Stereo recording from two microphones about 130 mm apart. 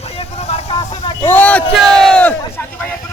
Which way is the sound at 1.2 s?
15° left (ahead or behind).